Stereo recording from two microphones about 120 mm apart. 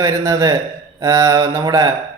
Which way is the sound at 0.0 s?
30° right (ahead or behind).